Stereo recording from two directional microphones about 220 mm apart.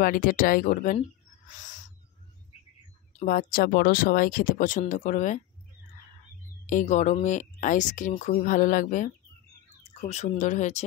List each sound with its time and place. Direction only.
0.0 s speech: 40° left (ahead or behind)
3.2 s speech: 40° left (ahead or behind)
6.6 s speech: 35° left (ahead or behind)